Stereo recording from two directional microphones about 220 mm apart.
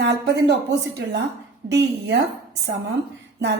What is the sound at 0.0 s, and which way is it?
Speech, 50° right (ahead or behind).